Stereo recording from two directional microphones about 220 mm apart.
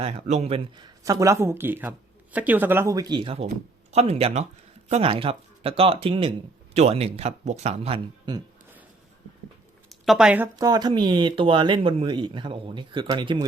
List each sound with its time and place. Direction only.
0.0 s speech: 30° right (ahead or behind)
9.9 s speech: centre (ahead or behind); by 13.4 s 20° right (ahead or behind)